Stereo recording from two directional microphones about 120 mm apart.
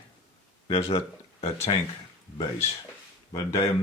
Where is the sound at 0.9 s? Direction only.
60° left (ahead or behind).